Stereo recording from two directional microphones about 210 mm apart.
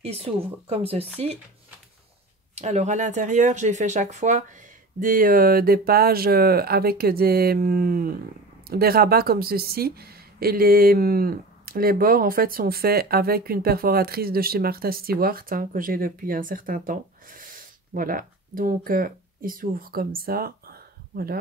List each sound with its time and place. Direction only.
0.0 s speech: 30° right (ahead or behind)
2.5 s a woman's voice: 30° right (ahead or behind)